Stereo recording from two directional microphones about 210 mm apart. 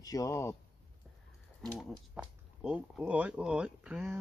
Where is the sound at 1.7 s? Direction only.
5° right (ahead or behind).